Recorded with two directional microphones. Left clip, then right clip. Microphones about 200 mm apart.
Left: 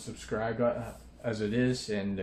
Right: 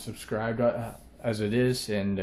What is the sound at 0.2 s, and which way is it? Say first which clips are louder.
Speech: right 3 dB; 50° right (ahead or behind).